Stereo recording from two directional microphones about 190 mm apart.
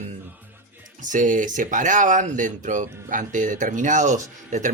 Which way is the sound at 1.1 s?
40° right (ahead or behind).